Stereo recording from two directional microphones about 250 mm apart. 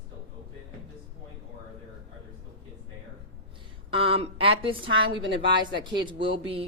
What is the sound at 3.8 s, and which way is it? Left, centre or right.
A woman's voice, right.